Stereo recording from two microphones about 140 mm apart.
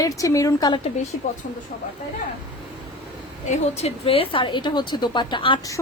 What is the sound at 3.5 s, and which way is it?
Speech, 50° left (ahead or behind).